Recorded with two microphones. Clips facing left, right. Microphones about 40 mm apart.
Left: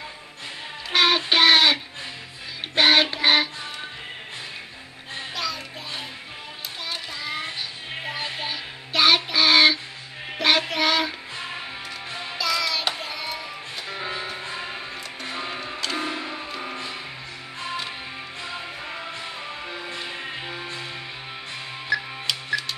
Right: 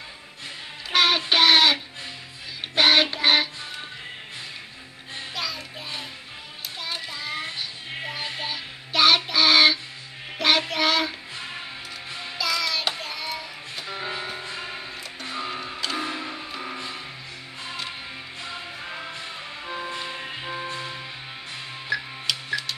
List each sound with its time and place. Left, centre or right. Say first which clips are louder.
0.9 s child singing: left 1 dB; centre
2.7 s music: left 1 dB; centre
5.3 s music: left 1 dB; centre
6.9 s child singing: left 1 dB; centre
8.1 s music: left 2 dB; centre
10.4 s child singing: left 1 dB; centre
12.4 s music: left 1 dB; centre
18.4 s music: left 1 dB; centre
19.9 s music: even; centre
20.5 s music: right 2 dB; centre
22.2 s music: left 1 dB; centre